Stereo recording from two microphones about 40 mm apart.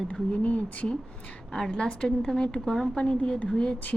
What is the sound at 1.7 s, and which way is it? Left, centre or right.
Speech, left.